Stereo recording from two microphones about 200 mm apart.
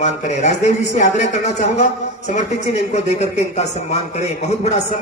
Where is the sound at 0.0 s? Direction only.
35° left (ahead or behind).